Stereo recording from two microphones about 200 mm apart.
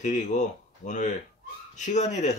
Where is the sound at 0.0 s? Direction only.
40° left (ahead or behind).